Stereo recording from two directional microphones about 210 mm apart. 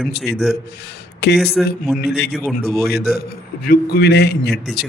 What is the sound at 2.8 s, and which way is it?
A man's voice, 50° left (ahead or behind).